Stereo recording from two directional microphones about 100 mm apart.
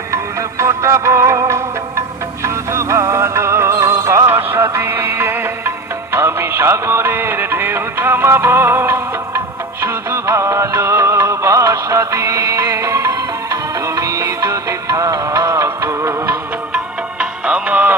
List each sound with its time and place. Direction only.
0.1 s music: 30° right (ahead or behind)
16.7 s music: 10° right (ahead or behind)